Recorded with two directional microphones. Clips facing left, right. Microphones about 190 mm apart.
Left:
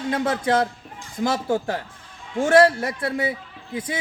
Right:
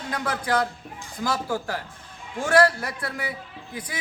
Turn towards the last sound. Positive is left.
turn(degrees=25)  # may be behind; listen again after turning